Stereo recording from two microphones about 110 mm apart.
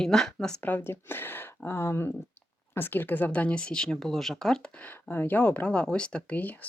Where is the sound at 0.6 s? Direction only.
15° left (ahead or behind).